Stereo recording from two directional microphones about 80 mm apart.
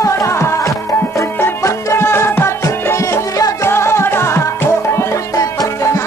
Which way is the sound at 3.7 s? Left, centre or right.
Left.